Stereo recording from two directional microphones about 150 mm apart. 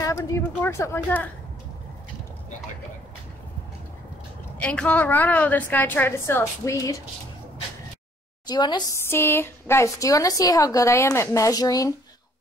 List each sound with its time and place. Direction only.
0.0 s a woman's voice: 20° left (ahead or behind)
4.6 s a woman's voice: 10° left (ahead or behind)
8.5 s a woman's voice: 30° left (ahead or behind)
9.1 s a woman's voice: 15° left (ahead or behind)